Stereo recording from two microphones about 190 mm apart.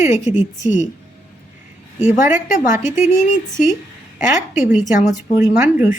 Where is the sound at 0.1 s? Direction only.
40° left (ahead or behind).